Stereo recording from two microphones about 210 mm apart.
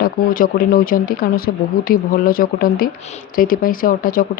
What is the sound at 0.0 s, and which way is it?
Speech, 40° left (ahead or behind).